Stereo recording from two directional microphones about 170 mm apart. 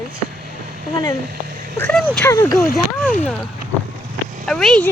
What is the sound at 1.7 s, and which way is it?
Speech, 10° left (ahead or behind).